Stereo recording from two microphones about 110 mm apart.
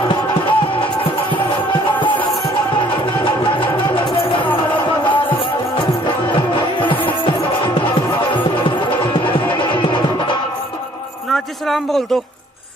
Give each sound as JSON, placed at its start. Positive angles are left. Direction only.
{"t": 0.0, "sound": "music", "side_deg": 50}
{"t": 3.4, "sound": "music", "side_deg": 50}
{"t": 11.3, "sound": "a sound", "side_deg": 0}